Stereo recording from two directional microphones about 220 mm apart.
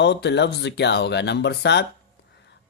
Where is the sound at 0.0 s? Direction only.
50° left (ahead or behind).